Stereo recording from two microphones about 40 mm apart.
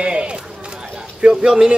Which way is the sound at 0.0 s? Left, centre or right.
Right.